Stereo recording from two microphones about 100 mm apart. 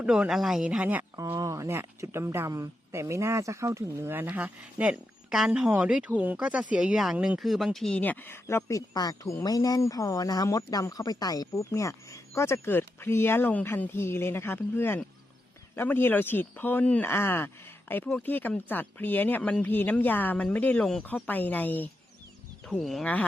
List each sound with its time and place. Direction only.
0.0 s speech: 10° right (ahead or behind)
1.1 s speech: 35° right (ahead or behind); by 7.9 s 5° left (ahead or behind)
7.9 s speech: 15° left (ahead or behind)
22.6 s speech: centre (ahead or behind)